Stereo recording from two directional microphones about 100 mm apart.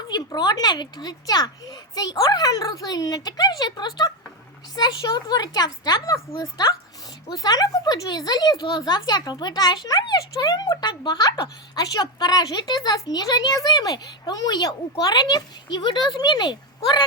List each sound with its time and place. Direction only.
0.1 s a child's voice: 45° left (ahead or behind)